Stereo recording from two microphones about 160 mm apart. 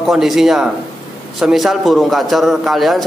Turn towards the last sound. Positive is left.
turn(degrees=0)  # may be behind; listen again after turning